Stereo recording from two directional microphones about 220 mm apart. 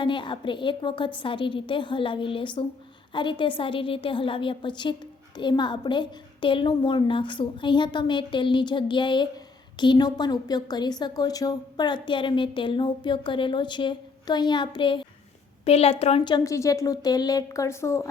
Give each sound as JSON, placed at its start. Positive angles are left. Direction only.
{"t": 0.0, "sound": "a woman's voice", "side_deg": 20}